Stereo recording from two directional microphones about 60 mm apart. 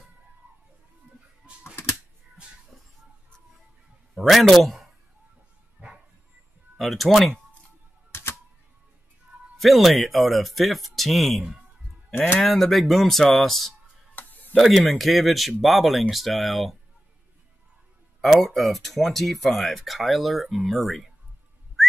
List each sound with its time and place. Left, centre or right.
1.6 s typewriter: left
2.7 s a sound: centre
4.1 s a man's voice: centre
5.8 s bow-wow: right
6.8 s speech: centre
8.1 s typewriter: left
9.6 s speech: centre
12.1 s speech: left
12.4 s speech: centre
14.1 s a sound: left
14.5 s speech: centre
18.2 s speech: centre
21.8 s whistling: centre